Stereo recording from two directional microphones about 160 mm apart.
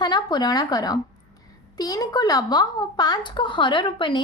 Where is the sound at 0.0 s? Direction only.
25° left (ahead or behind).